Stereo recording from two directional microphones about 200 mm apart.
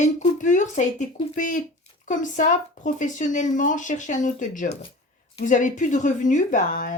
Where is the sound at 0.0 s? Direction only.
40° left (ahead or behind).